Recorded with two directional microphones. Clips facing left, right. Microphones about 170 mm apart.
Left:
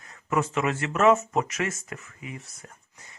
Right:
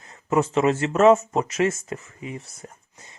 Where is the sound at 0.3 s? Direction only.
30° right (ahead or behind).